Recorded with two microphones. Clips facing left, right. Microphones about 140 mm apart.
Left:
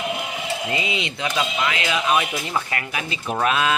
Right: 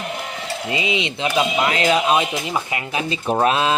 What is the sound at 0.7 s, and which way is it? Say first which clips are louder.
Speech: right 3 dB; 20° right (ahead or behind).